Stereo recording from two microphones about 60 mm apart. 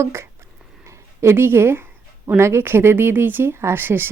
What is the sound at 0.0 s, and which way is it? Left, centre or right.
A woman's voice, right.